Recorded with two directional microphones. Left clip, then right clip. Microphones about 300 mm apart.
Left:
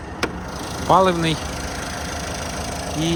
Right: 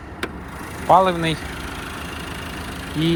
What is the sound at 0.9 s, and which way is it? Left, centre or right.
Speech, centre.